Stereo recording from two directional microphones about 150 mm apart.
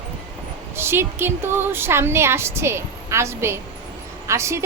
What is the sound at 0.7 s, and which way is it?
A woman's voice, 15° right (ahead or behind).